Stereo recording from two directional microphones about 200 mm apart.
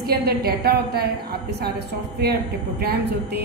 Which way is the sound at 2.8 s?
50° right (ahead or behind).